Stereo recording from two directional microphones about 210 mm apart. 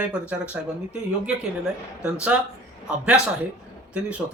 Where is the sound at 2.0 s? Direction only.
5° right (ahead or behind).